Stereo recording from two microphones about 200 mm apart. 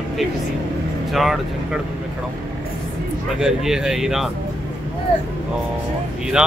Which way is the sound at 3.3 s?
5° right (ahead or behind).